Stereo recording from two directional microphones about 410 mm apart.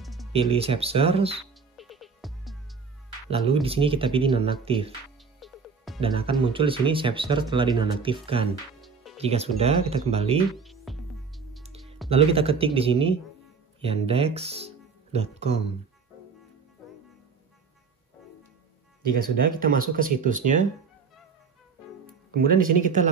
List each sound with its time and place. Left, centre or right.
0.0 s music: centre
0.3 s speech: centre
1.8 s music: centre
3.3 s speech: centre
5.4 s music: centre
5.9 s speech: centre
9.2 s speech: centre
10.6 s music: centre
12.1 s speech: centre
19.9 s speech: centre
22.3 s speech: right